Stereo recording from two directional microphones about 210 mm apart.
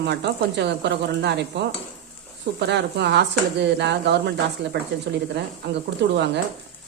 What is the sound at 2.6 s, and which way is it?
Speech, 55° right (ahead or behind).